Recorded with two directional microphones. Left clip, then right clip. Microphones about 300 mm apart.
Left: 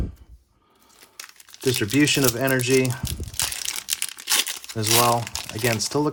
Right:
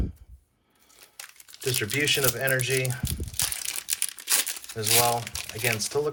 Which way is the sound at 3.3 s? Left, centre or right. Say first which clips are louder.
Left 4 dB; centre.